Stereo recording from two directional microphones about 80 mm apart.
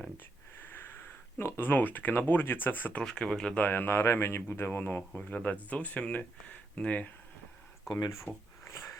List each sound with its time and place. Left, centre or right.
0.7 s speech: left
3.0 s speech: centre
3.6 s speech: left
7.9 s speech: left